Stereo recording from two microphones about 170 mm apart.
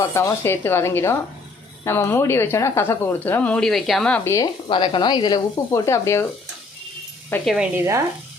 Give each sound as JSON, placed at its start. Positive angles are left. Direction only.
{"t": 0.0, "sound": "speech", "side_deg": 15}
{"t": 4.2, "sound": "speech", "side_deg": 15}
{"t": 4.7, "sound": "speech", "side_deg": 30}
{"t": 7.4, "sound": "a woman's voice", "side_deg": -5}